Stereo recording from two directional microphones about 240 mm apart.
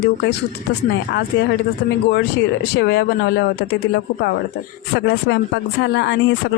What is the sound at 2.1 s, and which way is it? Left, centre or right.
Speech, left.